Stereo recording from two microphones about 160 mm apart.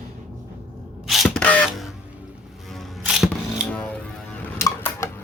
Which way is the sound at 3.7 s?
10° left (ahead or behind).